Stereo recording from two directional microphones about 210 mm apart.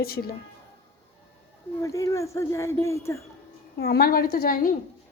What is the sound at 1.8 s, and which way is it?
Speech, 15° left (ahead or behind).